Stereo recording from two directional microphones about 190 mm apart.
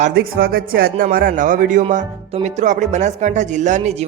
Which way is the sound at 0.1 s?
55° right (ahead or behind).